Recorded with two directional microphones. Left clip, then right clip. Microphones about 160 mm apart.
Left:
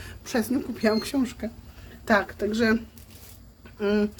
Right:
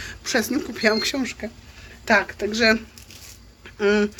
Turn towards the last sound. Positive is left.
turn(degrees=-5)  # may be behind; listen again after turning